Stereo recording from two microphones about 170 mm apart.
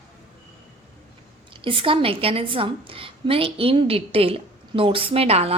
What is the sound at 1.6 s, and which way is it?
A woman's voice, 30° right (ahead or behind).